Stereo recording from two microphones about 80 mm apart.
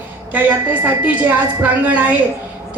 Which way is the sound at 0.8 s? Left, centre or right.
Right.